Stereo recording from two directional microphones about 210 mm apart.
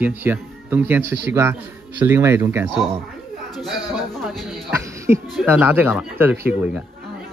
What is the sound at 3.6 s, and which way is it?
Speech, centre (ahead or behind).